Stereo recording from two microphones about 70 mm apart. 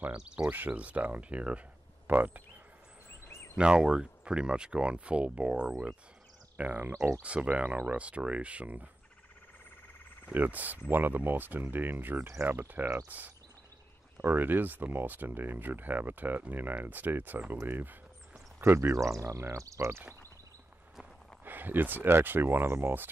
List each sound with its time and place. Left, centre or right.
0.1 s speech: centre
0.5 s speech: right
3.5 s speech: centre
10.3 s speech: right
14.2 s speech: right
18.6 s speech: right
21.5 s speech: right